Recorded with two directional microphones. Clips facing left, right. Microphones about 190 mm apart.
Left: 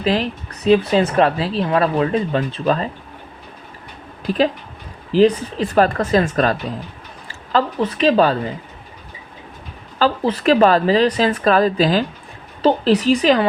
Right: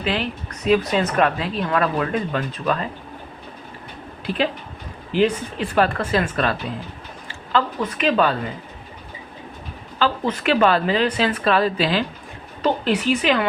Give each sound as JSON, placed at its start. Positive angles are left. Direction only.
{"t": 0.0, "sound": "speech", "side_deg": 35}
{"t": 4.3, "sound": "a woman's voice", "side_deg": 40}
{"t": 10.0, "sound": "speech", "side_deg": 35}